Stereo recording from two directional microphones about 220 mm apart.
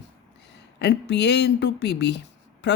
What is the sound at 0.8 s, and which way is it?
Speech, 50° left (ahead or behind).